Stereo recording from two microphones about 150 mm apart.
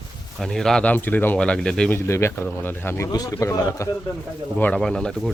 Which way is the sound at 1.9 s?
20° left (ahead or behind).